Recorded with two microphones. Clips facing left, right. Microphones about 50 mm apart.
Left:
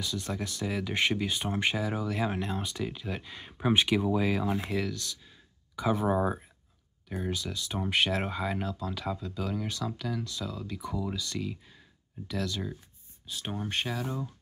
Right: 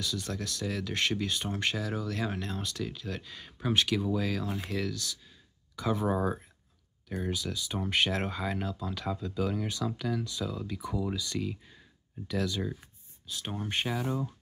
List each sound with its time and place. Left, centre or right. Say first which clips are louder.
0.0 s speech: left 1 dB; centre